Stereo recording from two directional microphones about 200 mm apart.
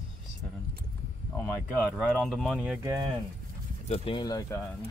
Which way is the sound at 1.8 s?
Centre (ahead or behind).